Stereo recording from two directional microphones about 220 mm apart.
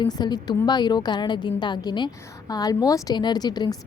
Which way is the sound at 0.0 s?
20° left (ahead or behind).